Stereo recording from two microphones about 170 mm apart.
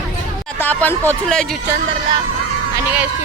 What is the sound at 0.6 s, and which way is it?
Speech, 10° left (ahead or behind).